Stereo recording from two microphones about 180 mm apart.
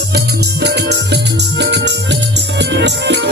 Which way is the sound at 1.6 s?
75° right (ahead or behind).